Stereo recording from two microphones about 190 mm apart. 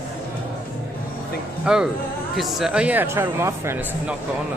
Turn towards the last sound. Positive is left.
turn(degrees=-10)  # may be behind; listen again after turning